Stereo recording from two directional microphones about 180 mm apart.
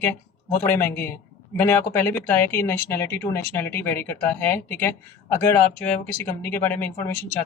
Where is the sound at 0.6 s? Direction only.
15° left (ahead or behind).